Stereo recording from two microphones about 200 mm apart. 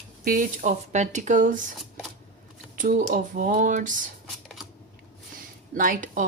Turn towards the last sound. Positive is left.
turn(degrees=-40)  # may be behind; listen again after turning